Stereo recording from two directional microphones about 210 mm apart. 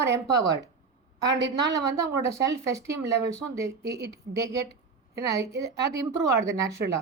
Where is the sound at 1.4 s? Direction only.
55° right (ahead or behind).